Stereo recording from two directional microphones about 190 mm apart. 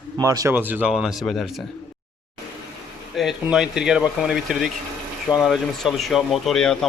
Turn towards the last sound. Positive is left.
turn(degrees=0)  # may be behind; listen again after turning